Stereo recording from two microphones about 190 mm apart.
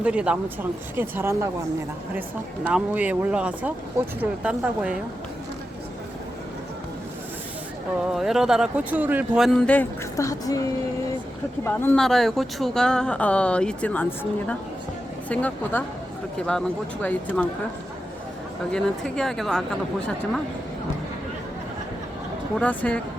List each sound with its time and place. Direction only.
0.0 s speech: 5° right (ahead or behind)
2.6 s speech: 5° right (ahead or behind)
8.1 s speech: centre (ahead or behind); by 10.6 s 20° left (ahead or behind)
11.6 s speech: 10° left (ahead or behind)
18.7 s speech: 5° left (ahead or behind)
22.5 s speech: 5° left (ahead or behind)